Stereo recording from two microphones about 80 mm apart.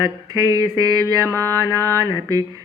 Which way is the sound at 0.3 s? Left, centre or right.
Right.